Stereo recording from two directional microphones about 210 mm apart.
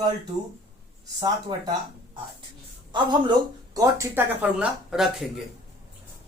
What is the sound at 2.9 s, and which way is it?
Speech, 20° right (ahead or behind).